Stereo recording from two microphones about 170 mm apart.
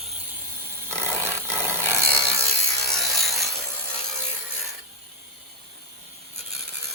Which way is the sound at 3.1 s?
Centre (ahead or behind).